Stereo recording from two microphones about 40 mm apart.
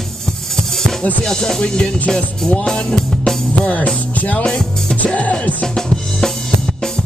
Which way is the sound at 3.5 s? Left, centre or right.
Left.